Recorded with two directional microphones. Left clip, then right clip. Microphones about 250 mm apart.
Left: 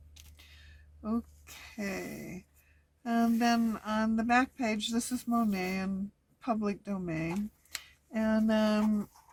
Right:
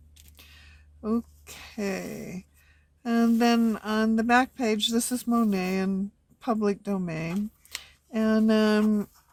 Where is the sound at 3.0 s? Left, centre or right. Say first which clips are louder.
Right 5 dB; right.